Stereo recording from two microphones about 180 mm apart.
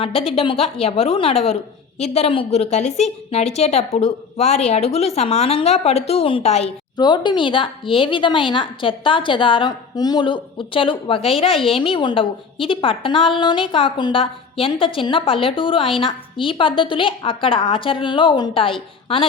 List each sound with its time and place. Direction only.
0.0 s a woman's voice: 30° left (ahead or behind)
6.9 s speech: 25° left (ahead or behind)